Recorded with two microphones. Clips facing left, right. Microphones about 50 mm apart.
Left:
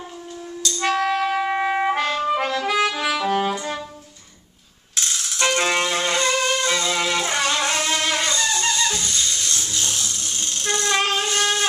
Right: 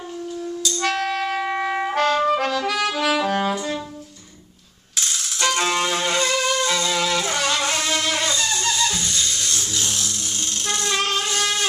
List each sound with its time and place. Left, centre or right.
0.7 s music: centre
3.3 s brass instrument: centre
5.4 s music: centre
11.2 s wind instrument: centre